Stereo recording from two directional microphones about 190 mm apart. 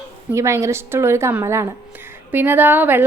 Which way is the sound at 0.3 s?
15° right (ahead or behind).